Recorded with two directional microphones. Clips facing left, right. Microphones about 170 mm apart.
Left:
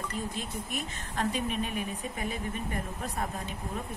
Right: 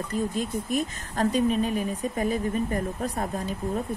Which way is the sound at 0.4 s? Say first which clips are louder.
Right 9 dB; 40° right (ahead or behind).